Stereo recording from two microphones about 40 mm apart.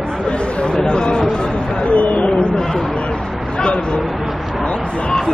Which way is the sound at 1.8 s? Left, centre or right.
Left.